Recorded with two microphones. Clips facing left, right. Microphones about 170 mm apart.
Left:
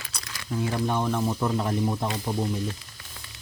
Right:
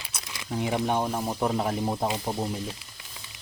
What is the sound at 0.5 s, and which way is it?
Speech, 15° right (ahead or behind).